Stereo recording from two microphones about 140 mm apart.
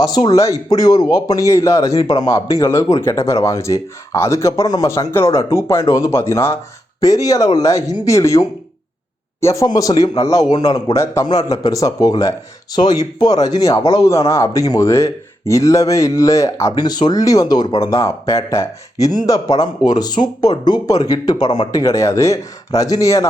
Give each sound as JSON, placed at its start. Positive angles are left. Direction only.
{"t": 0.3, "sound": "speech", "side_deg": 25}